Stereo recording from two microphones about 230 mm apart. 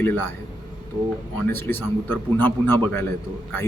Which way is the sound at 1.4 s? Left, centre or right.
Centre.